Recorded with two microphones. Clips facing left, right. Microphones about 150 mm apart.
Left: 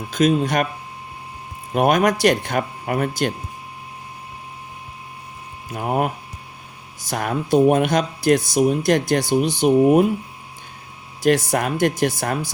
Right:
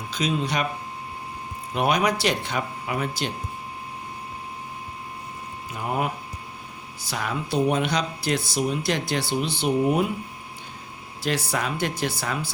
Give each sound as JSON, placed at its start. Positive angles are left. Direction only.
{"t": 0.1, "sound": "speech", "side_deg": 50}
{"t": 1.7, "sound": "speech", "side_deg": 50}
{"t": 5.7, "sound": "speech", "side_deg": 50}
{"t": 11.2, "sound": "speech", "side_deg": 45}